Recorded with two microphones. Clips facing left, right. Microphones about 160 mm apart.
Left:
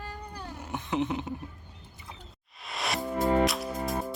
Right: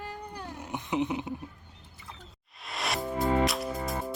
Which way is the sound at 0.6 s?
15° right (ahead or behind).